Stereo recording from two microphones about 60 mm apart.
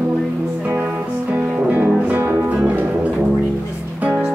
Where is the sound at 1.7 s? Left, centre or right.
Right.